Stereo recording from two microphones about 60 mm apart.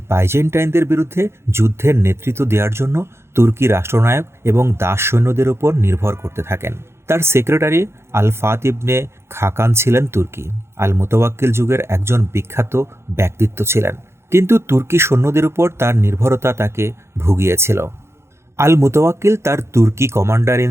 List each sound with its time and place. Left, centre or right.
0.1 s speech: right